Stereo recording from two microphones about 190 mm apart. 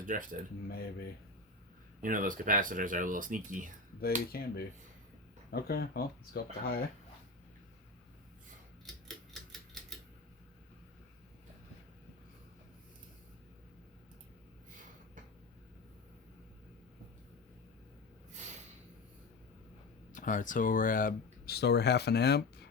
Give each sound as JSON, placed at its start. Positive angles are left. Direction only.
{"t": 0.0, "sound": "speech", "side_deg": -45}
{"t": 2.0, "sound": "speech", "side_deg": -45}
{"t": 4.0, "sound": "cutlery", "side_deg": 55}
{"t": 5.5, "sound": "speech", "side_deg": 55}
{"t": 9.0, "sound": "typewriter", "side_deg": 0}
{"t": 20.1, "sound": "speech", "side_deg": 45}